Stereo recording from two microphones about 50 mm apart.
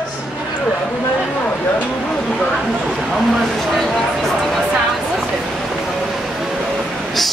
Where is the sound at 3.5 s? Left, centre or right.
Centre.